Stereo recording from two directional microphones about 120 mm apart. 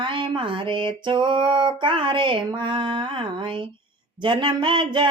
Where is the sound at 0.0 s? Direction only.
45° right (ahead or behind).